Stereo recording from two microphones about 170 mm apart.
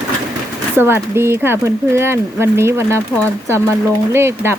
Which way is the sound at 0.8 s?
15° right (ahead or behind).